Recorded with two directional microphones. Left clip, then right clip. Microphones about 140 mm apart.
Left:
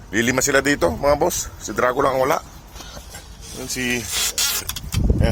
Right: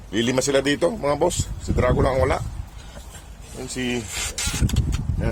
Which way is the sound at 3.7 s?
5° right (ahead or behind).